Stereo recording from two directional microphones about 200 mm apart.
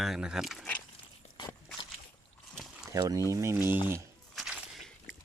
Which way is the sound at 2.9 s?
15° right (ahead or behind).